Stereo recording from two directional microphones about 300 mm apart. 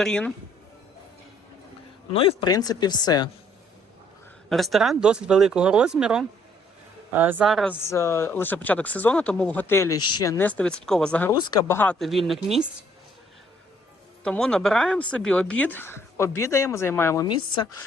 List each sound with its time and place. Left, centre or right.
0.0 s speech: centre
2.1 s speech: centre
4.4 s speech: centre
14.3 s speech: centre